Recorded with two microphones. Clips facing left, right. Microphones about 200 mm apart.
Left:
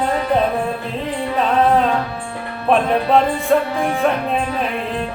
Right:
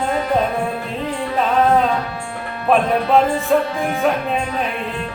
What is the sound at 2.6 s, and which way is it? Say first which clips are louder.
Music: even; centre (ahead or behind).